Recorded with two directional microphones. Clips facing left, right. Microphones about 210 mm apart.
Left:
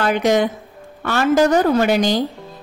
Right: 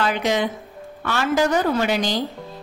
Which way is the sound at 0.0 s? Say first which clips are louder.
Left 5 dB; 45° left (ahead or behind).